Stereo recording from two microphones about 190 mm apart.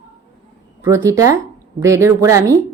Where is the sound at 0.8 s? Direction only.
15° right (ahead or behind).